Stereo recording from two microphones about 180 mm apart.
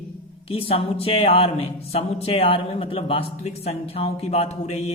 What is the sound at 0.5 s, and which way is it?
Speech, 30° left (ahead or behind).